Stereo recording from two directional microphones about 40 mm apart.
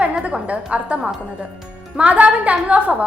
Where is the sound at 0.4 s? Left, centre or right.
Right.